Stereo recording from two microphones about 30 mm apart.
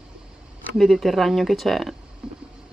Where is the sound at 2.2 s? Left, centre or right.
Right.